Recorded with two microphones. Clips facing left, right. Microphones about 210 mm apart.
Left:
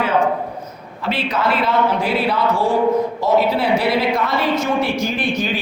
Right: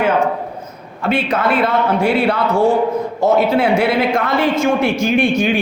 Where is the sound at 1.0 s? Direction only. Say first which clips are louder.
Right 4 dB; 50° right (ahead or behind).